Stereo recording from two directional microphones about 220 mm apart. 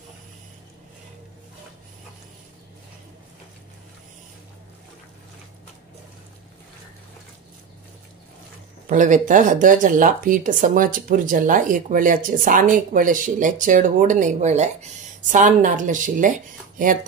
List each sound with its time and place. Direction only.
8.8 s speech: 35° right (ahead or behind)